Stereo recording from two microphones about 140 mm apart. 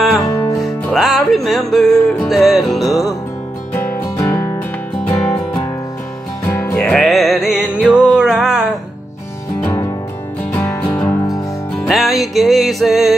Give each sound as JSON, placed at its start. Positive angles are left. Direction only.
{"t": 0.2, "sound": "music", "side_deg": 20}
{"t": 0.6, "sound": "music", "side_deg": 0}
{"t": 3.7, "sound": "music", "side_deg": 20}
{"t": 6.8, "sound": "music", "side_deg": 0}
{"t": 9.6, "sound": "music", "side_deg": 10}
{"t": 11.8, "sound": "music", "side_deg": 0}